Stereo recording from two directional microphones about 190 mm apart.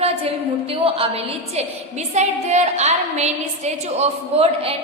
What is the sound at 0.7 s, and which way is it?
A woman's voice, 30° right (ahead or behind).